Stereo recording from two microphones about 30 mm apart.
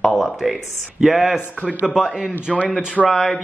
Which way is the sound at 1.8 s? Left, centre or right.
Right.